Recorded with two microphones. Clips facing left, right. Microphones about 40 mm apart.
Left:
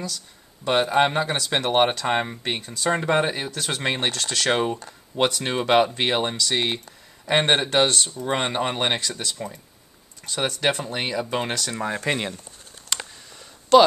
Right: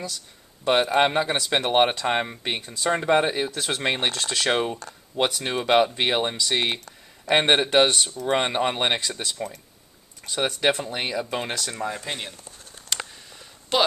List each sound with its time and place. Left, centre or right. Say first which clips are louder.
0.7 s speech: even; centre
2.6 s speech: left 1 dB; centre
2.9 s speech: right 1 dB; centre
4.5 s speech: left 2 dB; centre
12.1 s speech: left 7 dB; left
12.9 s clicking: even; centre
13.7 s speech: left 8 dB; centre